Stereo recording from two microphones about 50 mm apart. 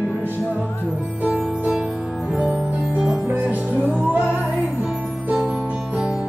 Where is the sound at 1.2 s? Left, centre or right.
Right.